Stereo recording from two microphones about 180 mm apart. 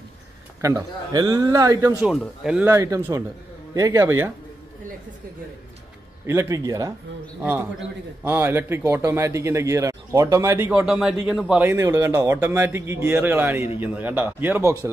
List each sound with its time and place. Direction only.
0.6 s a man's voice: 15° right (ahead or behind)
2.7 s speech: 15° right (ahead or behind)
6.2 s speech: 15° right (ahead or behind)
8.2 s speech: 10° right (ahead or behind)
10.9 s a man's voice: centre (ahead or behind)
11.6 s speech: 15° right (ahead or behind)